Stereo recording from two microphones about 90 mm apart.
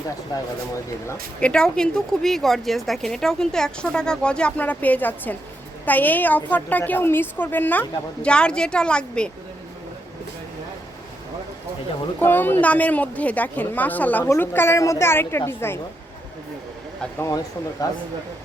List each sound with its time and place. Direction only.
0.3 s speech: 45° left (ahead or behind)
1.4 s a woman's voice: 10° left (ahead or behind)
12.2 s a woman's voice: 20° left (ahead or behind)